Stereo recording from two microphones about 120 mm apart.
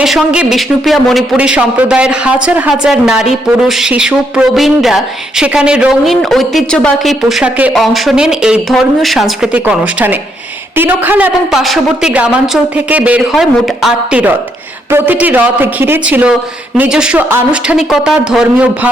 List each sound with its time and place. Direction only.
0.0 s a woman's voice: 5° right (ahead or behind)
11.5 s speech: centre (ahead or behind)
12.7 s a woman's voice: 10° right (ahead or behind)